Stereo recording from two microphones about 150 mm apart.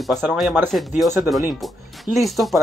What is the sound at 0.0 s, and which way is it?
Speech, centre (ahead or behind).